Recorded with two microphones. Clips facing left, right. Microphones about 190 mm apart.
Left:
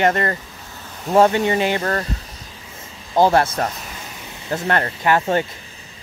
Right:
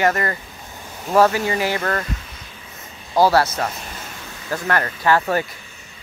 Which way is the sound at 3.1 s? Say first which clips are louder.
Left 1 dB; 20° left (ahead or behind).